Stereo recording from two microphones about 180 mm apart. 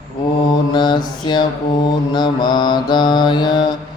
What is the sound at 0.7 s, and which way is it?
Mantra, 25° left (ahead or behind).